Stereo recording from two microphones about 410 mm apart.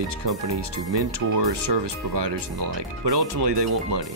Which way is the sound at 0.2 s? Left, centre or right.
Right.